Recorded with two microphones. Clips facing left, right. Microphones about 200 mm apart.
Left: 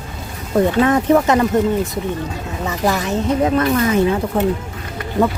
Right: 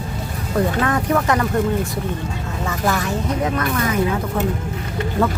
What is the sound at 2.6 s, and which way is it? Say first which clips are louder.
Speech: left 2 dB; 20° left (ahead or behind).